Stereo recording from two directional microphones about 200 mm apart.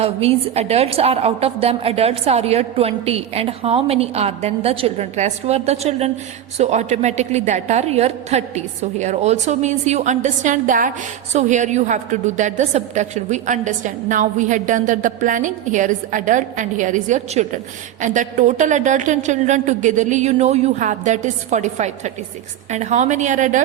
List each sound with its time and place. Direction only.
0.0 s a woman's voice: 30° right (ahead or behind)